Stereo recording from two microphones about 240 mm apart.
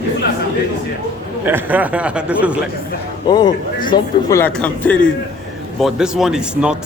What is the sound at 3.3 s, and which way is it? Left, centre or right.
Speech, centre.